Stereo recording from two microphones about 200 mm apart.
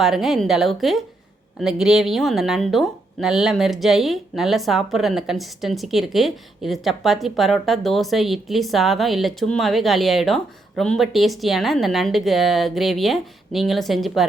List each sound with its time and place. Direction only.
0.0 s speech: centre (ahead or behind)